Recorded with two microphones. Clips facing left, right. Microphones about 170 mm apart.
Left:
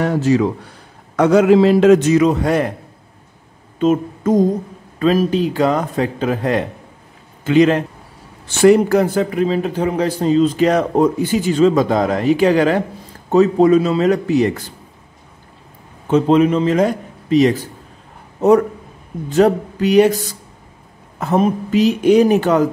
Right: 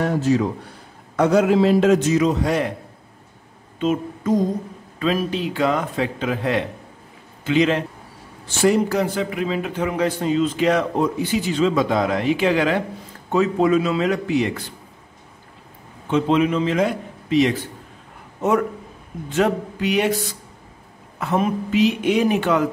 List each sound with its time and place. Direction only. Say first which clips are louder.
0.0 s a man's voice: left 4 dB; 80° left; by 2.7 s 55° left (ahead or behind)
3.8 s mantra: left 6 dB; 45° left (ahead or behind)
4.9 s a man's voice: left 7 dB; 40° left (ahead or behind)
7.4 s mantra: left 6 dB; 45° left (ahead or behind)
8.5 s a man's voice: left 7 dB; 65° left (ahead or behind); by 14.6 s 40° left (ahead or behind)
16.1 s a man's voice: left 5 dB; 40° left (ahead or behind)
21.2 s a man's voice: left 5 dB; 40° left (ahead or behind)